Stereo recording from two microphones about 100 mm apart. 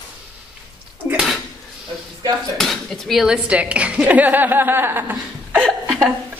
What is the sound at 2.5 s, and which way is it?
Speech, 5° left (ahead or behind).